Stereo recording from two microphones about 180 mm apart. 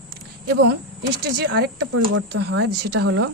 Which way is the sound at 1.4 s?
90° right.